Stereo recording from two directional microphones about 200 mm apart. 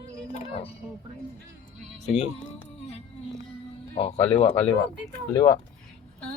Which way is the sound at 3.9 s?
30° left (ahead or behind).